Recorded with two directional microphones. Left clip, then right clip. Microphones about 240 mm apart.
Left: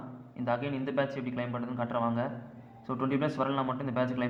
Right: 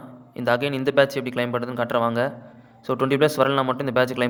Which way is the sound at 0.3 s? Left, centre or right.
Right.